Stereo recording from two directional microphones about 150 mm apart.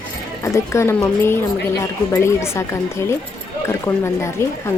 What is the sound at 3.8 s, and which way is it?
Speech, 15° left (ahead or behind).